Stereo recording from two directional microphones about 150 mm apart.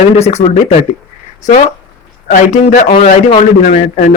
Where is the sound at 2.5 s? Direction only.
55° left (ahead or behind).